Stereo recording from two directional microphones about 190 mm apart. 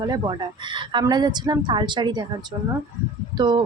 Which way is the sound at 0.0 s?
20° right (ahead or behind).